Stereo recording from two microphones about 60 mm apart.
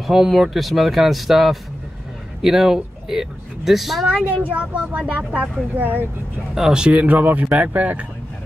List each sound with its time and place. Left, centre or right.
0.0 s speech: centre
4.5 s speech: right
6.5 s speech: centre; by 8.0 s right